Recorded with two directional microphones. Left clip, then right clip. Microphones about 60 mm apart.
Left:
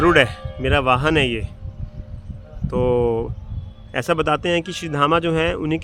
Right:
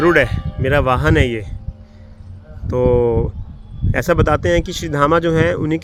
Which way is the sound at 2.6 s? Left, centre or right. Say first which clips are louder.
Right 4 dB; right.